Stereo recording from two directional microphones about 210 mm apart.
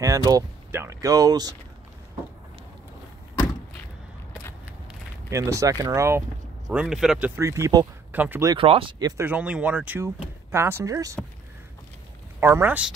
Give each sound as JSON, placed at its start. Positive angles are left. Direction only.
{"t": 0.0, "sound": "speech", "side_deg": -15}
{"t": 5.3, "sound": "speech", "side_deg": -15}
{"t": 8.5, "sound": "speech", "side_deg": -25}
{"t": 9.1, "sound": "speech", "side_deg": -10}
{"t": 12.4, "sound": "speech", "side_deg": -10}